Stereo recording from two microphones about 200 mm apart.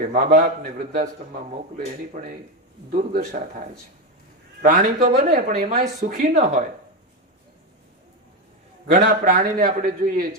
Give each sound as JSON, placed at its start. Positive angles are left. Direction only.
{"t": 0.1, "sound": "a man's voice", "side_deg": -45}
{"t": 2.1, "sound": "a man's voice", "side_deg": -45}
{"t": 4.6, "sound": "a man's voice", "side_deg": -45}
{"t": 8.9, "sound": "a man's voice", "side_deg": -45}